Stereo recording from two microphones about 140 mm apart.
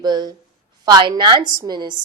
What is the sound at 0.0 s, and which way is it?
A woman's voice, 30° right (ahead or behind).